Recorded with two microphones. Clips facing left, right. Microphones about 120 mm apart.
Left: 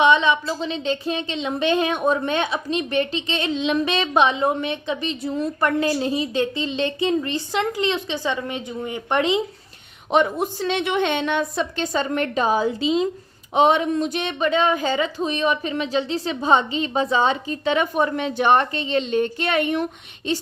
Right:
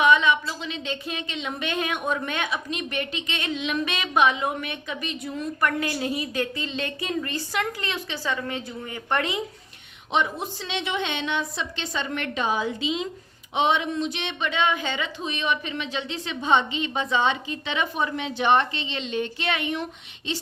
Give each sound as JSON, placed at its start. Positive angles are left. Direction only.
{"t": 0.0, "sound": "a woman's voice", "side_deg": 30}
{"t": 10.1, "sound": "a woman's voice", "side_deg": 50}